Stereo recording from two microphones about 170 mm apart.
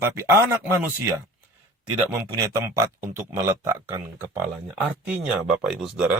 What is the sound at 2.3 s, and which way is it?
A man's voice, 20° right (ahead or behind).